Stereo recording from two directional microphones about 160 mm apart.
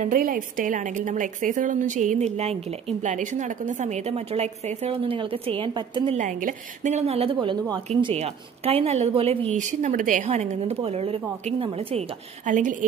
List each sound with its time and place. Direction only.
0.0 s a woman's voice: 60° right (ahead or behind); by 6.1 s 30° right (ahead or behind)
6.1 s a woman's voice: 50° right (ahead or behind)
7.3 s a woman's voice: 25° right (ahead or behind)
8.0 s a woman's voice: 40° right (ahead or behind)
12.4 s a woman's voice: 55° right (ahead or behind)